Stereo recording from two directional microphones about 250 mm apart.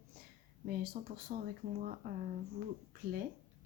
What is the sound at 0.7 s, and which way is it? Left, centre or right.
Speech, right.